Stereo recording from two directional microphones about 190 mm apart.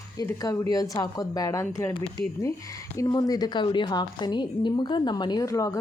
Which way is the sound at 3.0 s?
20° left (ahead or behind).